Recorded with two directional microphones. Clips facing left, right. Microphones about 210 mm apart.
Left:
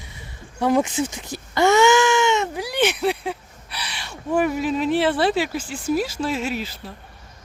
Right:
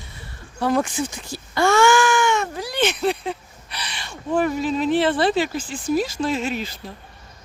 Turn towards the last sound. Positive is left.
turn(degrees=5)  # may be behind; listen again after turning